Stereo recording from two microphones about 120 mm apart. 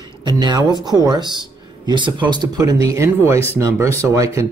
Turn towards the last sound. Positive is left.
turn(degrees=-25)  # may be behind; listen again after turning